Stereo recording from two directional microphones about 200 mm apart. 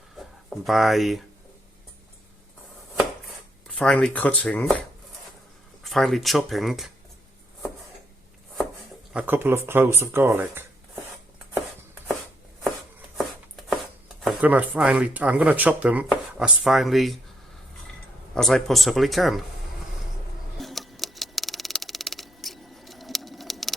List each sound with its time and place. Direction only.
0.5 s speech: centre (ahead or behind)
3.7 s speech: 5° left (ahead or behind)
5.8 s speech: centre (ahead or behind)
9.1 s speech: 10° right (ahead or behind)
13.1 s chopping: centre (ahead or behind)
14.2 s speech: 5° right (ahead or behind)
18.3 s speech: centre (ahead or behind)
20.6 s a sound: centre (ahead or behind)